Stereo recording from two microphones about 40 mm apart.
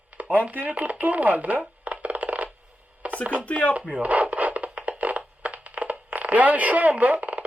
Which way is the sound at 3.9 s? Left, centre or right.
Right.